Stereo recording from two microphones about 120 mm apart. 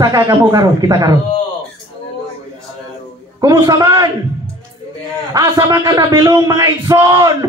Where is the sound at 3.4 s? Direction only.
30° right (ahead or behind).